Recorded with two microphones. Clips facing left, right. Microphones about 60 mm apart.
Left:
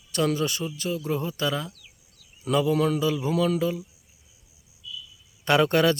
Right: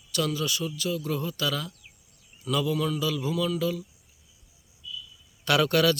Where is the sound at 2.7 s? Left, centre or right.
Left.